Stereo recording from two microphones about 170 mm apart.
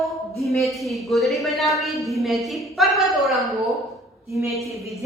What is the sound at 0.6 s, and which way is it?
A woman's voice, centre (ahead or behind).